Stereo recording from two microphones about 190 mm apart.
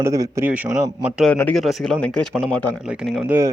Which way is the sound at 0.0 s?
15° right (ahead or behind).